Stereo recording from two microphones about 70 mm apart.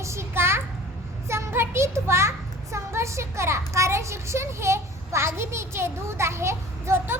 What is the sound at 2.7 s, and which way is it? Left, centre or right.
A child's voice, right.